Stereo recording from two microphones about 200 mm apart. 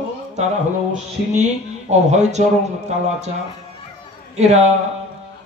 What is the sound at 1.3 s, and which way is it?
Speech, 35° right (ahead or behind).